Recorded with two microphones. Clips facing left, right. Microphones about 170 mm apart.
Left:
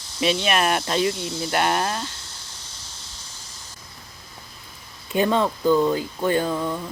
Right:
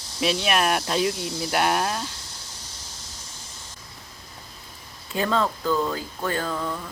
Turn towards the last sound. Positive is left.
turn(degrees=15)  # may be behind; listen again after turning